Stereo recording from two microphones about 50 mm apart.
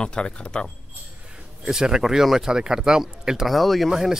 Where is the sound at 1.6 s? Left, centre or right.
Centre.